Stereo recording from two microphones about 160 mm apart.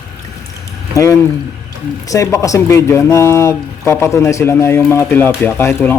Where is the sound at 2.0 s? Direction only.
20° left (ahead or behind).